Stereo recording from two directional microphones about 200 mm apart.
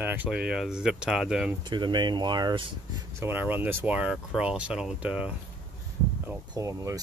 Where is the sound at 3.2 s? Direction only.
10° right (ahead or behind).